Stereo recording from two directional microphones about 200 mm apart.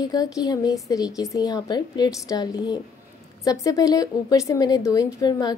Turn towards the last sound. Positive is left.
turn(degrees=20)  # may be behind; listen again after turning